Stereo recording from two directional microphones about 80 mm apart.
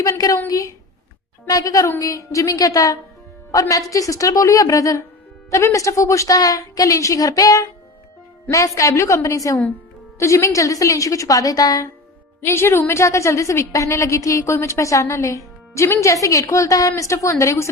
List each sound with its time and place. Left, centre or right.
0.0 s a woman's voice: left
12.4 s a woman's voice: left